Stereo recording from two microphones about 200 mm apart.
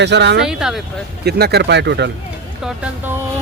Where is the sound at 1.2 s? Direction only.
55° right (ahead or behind).